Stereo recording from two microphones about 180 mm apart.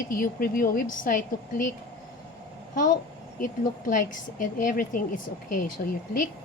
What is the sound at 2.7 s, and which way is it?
Speech, 45° left (ahead or behind).